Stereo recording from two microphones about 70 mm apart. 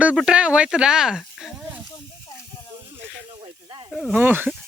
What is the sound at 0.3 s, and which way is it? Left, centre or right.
Speech, centre.